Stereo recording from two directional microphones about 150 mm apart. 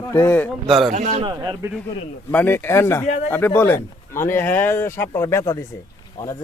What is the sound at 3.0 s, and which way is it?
Speech, 50° left (ahead or behind).